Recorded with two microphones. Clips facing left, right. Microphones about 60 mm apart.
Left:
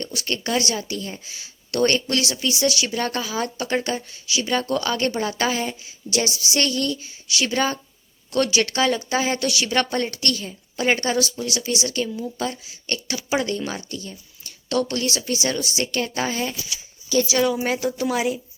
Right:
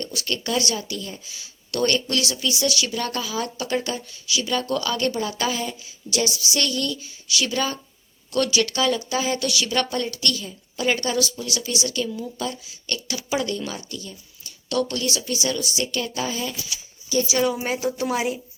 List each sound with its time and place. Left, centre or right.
0.0 s speech: left
17.9 s speech: right